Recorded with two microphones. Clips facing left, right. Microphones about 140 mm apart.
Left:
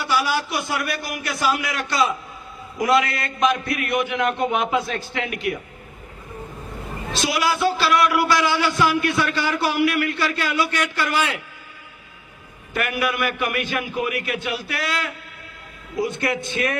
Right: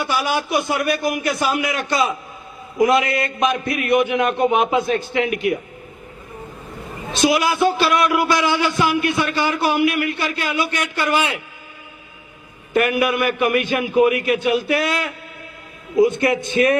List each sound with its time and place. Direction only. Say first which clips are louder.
0.0 s a man's voice: right 1 dB; 20° right (ahead or behind)
7.1 s a man's voice: right 5 dB; 20° right (ahead or behind)
12.7 s a man's voice: right 6 dB; 20° right (ahead or behind)